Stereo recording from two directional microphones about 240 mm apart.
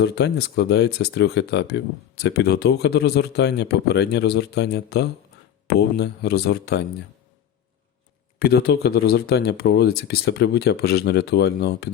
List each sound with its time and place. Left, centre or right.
0.0 s speech: left
8.4 s speech: left